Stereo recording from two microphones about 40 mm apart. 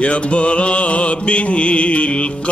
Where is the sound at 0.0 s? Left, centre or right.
Left.